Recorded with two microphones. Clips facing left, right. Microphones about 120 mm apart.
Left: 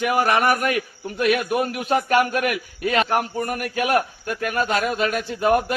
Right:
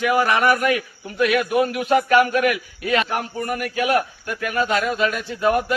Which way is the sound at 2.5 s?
45° left (ahead or behind).